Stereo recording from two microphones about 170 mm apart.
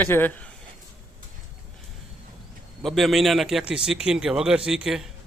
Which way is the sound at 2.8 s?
Centre (ahead or behind).